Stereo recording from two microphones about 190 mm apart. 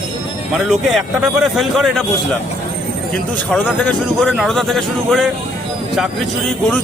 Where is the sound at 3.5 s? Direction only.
5° left (ahead or behind).